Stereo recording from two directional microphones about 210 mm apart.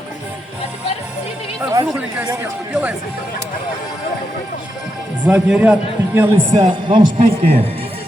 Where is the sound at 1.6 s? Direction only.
15° right (ahead or behind).